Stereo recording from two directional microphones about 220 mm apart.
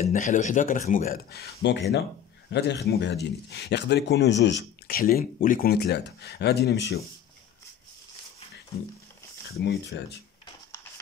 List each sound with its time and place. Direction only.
0.0 s speech: 35° left (ahead or behind)
9.5 s speech: 50° left (ahead or behind)